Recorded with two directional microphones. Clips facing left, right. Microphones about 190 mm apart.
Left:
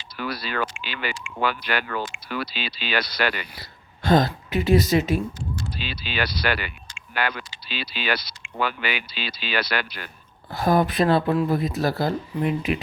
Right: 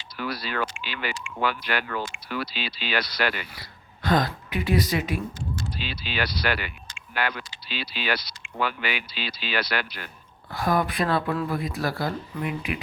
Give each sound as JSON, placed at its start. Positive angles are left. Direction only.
{"t": 0.2, "sound": "speech", "side_deg": 70}
{"t": 3.6, "sound": "speech", "side_deg": 25}
{"t": 5.8, "sound": "speech", "side_deg": 80}
{"t": 7.1, "sound": "speech", "side_deg": 90}
{"t": 10.5, "sound": "speech", "side_deg": 25}